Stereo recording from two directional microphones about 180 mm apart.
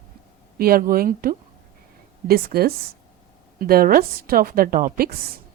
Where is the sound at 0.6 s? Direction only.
55° right (ahead or behind).